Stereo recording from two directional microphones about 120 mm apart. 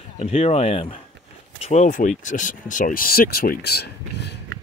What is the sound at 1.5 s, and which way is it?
Speech, 70° left (ahead or behind).